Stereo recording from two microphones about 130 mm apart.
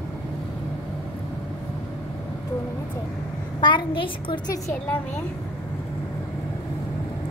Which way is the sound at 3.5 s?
40° left (ahead or behind).